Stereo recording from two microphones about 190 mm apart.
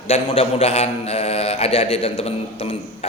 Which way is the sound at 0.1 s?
35° left (ahead or behind).